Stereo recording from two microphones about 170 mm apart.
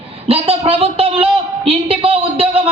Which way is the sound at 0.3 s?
35° right (ahead or behind).